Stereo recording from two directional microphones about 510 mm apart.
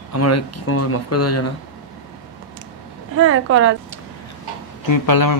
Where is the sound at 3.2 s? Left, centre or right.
Right.